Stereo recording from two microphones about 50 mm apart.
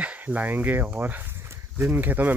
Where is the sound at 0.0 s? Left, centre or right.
Right.